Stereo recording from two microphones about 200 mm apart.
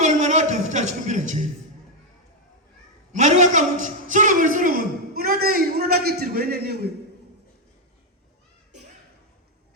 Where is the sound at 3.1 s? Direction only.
35° right (ahead or behind); by 6.9 s 55° right (ahead or behind).